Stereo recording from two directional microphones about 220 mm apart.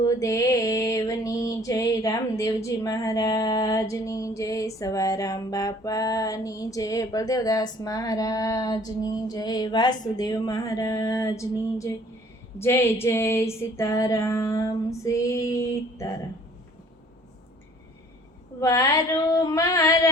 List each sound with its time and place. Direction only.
0.0 s music: 15° left (ahead or behind)
18.6 s music: 15° left (ahead or behind)